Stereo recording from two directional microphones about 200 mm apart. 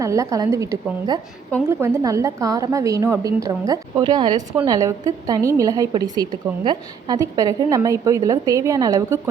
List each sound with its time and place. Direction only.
0.0 s a woman's voice: 15° right (ahead or behind)